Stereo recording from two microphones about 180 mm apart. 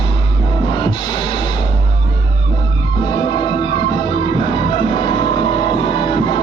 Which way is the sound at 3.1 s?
25° left (ahead or behind).